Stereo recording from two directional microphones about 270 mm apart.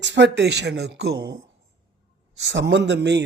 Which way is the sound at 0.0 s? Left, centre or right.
Right.